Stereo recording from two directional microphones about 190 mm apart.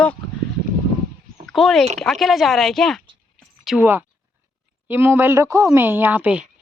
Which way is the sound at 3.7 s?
10° right (ahead or behind).